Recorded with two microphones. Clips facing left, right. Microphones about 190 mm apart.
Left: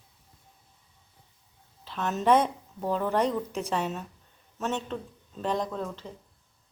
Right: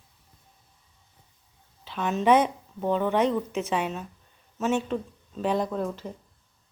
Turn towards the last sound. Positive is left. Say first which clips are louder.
# right 4 dB
turn(degrees=-10)  # may be behind; listen again after turning